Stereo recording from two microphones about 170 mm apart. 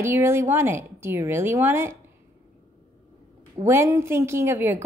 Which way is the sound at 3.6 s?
15° right (ahead or behind).